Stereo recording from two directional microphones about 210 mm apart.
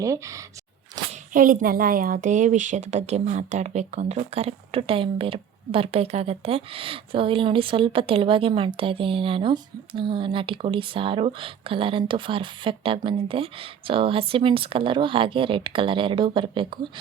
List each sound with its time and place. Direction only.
0.0 s speech: 15° right (ahead or behind)
1.1 s speech: 40° right (ahead or behind); by 16.8 s 25° right (ahead or behind)